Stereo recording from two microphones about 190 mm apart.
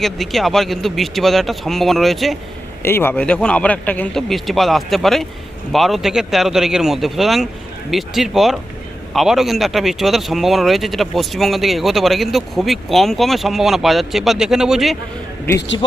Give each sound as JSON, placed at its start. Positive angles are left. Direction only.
{"t": 0.0, "sound": "speech", "side_deg": 0}
{"t": 2.8, "sound": "speech", "side_deg": 10}
{"t": 15.5, "sound": "a man's voice", "side_deg": 70}